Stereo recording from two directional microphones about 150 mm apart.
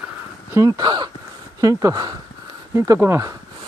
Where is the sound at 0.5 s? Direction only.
25° right (ahead or behind).